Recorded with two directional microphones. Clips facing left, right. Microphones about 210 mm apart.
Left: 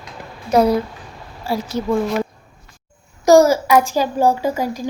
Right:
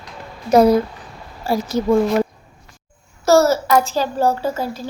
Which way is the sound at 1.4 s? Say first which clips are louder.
Right 2 dB; 45° right (ahead or behind).